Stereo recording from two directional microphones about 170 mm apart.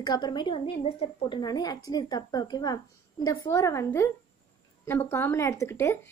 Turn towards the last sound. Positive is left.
turn(degrees=15)  # may be behind; listen again after turning